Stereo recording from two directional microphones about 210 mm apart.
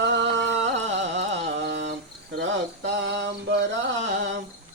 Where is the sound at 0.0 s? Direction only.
55° right (ahead or behind).